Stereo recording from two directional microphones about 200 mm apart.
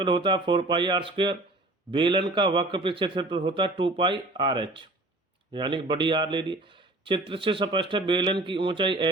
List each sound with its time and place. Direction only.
0.0 s a man's voice: 25° right (ahead or behind)